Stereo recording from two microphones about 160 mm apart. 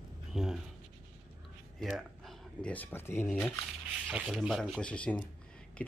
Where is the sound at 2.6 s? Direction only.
10° left (ahead or behind).